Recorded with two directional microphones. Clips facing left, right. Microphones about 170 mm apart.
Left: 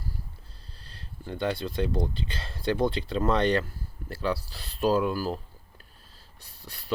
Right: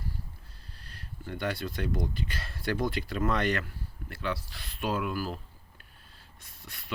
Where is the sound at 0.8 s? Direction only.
30° left (ahead or behind).